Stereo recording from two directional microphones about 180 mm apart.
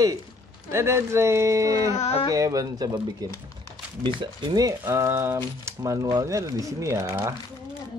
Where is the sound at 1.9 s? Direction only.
35° left (ahead or behind).